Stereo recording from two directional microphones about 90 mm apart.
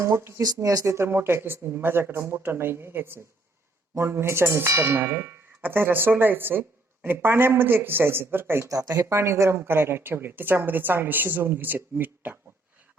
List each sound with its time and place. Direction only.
0.0 s speech: 30° right (ahead or behind)
0.4 s tubular bells: 45° right (ahead or behind); by 12.4 s 20° right (ahead or behind)